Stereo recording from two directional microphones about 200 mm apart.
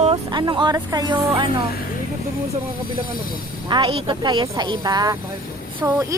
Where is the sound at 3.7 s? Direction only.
25° right (ahead or behind).